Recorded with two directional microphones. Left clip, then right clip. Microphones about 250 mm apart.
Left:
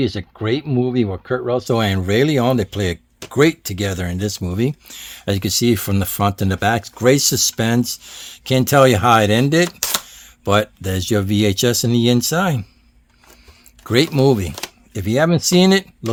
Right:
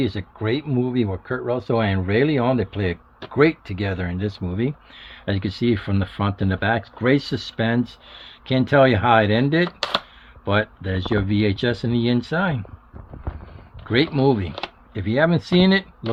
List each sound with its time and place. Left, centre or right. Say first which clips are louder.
0.0 s speech: left 3 dB; left
9.6 s speech: left 1 dB; left
10.4 s speech: left 5 dB; left
13.8 s speech: left 4 dB; left